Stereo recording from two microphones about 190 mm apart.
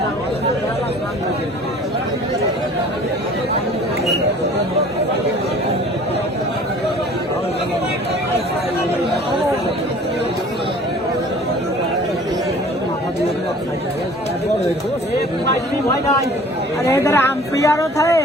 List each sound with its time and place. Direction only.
16.8 s a woman's voice: 15° left (ahead or behind)